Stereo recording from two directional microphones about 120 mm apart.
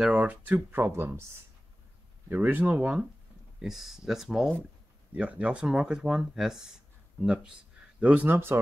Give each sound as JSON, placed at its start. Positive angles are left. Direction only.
{"t": 0.0, "sound": "speech", "side_deg": -10}